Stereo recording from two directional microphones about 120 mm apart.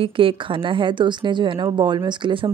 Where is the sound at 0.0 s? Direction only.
45° right (ahead or behind).